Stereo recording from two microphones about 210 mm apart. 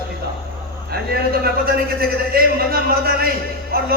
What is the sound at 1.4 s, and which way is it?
Speech, 45° right (ahead or behind).